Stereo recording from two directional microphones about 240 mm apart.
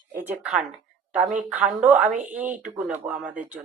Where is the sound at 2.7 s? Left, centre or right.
Centre.